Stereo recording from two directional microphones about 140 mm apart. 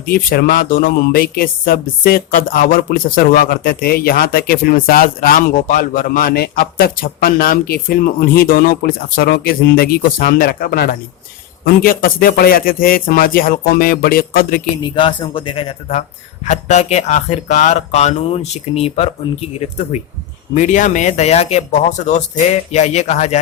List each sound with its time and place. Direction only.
0.0 s speech: 90° left
14.8 s speech: 35° left (ahead or behind)
16.5 s speech: 55° left (ahead or behind)
20.6 s speech: 65° left (ahead or behind)